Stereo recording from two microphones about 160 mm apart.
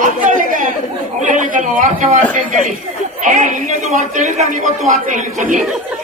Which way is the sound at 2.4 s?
55° right (ahead or behind).